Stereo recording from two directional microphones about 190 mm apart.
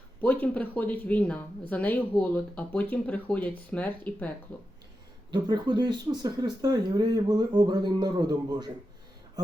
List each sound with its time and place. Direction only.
0.2 s speech: 10° left (ahead or behind)
5.3 s speech: 25° right (ahead or behind)